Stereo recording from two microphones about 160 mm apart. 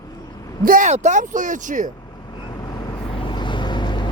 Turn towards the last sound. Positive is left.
turn(degrees=30)  # may be behind; listen again after turning